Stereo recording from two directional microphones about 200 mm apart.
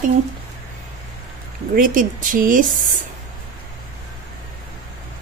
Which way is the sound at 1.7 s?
45° right (ahead or behind).